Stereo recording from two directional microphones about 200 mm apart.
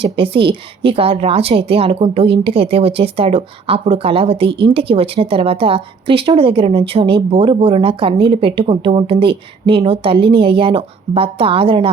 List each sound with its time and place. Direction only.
0.0 s a woman's voice: 25° right (ahead or behind)